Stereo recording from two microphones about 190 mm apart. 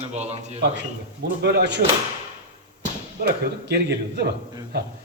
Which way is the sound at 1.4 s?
60° right (ahead or behind).